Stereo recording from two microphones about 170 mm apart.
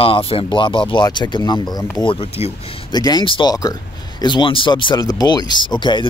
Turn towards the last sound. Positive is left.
turn(degrees=25)  # may be behind; listen again after turning